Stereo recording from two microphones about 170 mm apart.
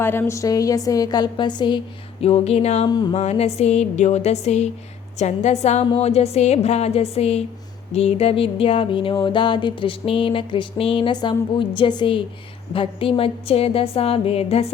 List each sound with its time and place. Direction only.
0.0 s a woman's voice: 15° left (ahead or behind)
2.2 s music: 35° left (ahead or behind)
2.8 s a woman's voice: 25° left (ahead or behind)
3.2 s music: 40° left (ahead or behind)